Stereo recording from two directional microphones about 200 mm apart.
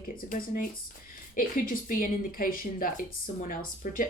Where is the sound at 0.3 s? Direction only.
45° left (ahead or behind).